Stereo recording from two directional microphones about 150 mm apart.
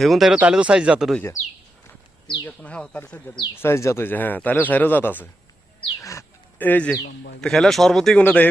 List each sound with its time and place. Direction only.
0.0 s speech: centre (ahead or behind)
2.4 s speech: 10° left (ahead or behind)
6.0 s bird: 20° left (ahead or behind)
7.4 s speech: centre (ahead or behind)